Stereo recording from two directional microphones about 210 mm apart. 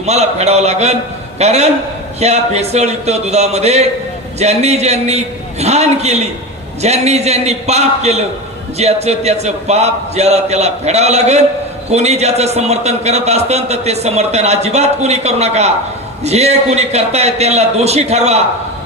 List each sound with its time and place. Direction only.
0.0 s a man's voice: 30° right (ahead or behind)